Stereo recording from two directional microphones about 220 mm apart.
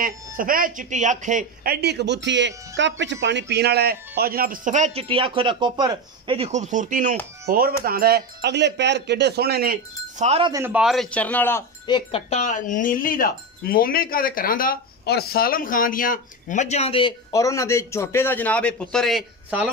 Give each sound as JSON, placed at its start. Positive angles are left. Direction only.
{"t": 0.0, "sound": "speech", "side_deg": -40}
{"t": 10.2, "sound": "speech", "side_deg": -25}
{"t": 10.5, "sound": "a man's voice", "side_deg": -10}
{"t": 11.9, "sound": "speech", "side_deg": 30}